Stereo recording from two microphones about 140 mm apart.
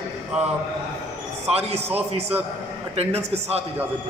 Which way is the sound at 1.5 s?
45° right (ahead or behind).